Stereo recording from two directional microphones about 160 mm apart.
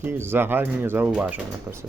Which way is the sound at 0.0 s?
15° right (ahead or behind).